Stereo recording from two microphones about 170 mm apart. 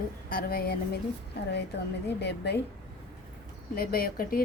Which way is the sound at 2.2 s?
80° left.